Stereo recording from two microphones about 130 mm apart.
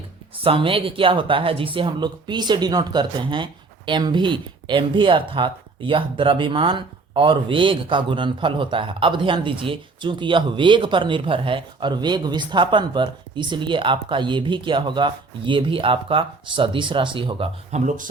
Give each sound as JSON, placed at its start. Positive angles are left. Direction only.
{"t": 0.4, "sound": "speech", "side_deg": -45}
{"t": 17.7, "sound": "speech", "side_deg": -70}